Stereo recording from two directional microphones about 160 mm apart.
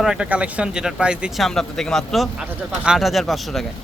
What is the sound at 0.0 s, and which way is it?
Speech, 5° right (ahead or behind).